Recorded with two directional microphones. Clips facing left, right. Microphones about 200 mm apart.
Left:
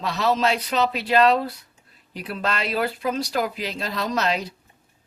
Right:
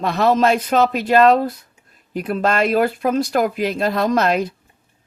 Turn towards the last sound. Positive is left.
turn(degrees=-50)  # may be behind; listen again after turning